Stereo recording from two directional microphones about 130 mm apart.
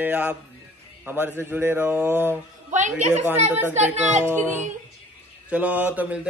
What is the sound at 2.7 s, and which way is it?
A woman's voice, 70° right (ahead or behind).